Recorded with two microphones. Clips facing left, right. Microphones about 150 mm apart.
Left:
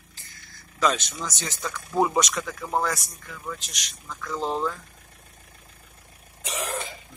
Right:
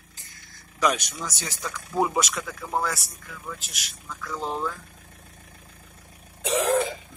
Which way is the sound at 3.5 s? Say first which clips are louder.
Even; 5° right (ahead or behind).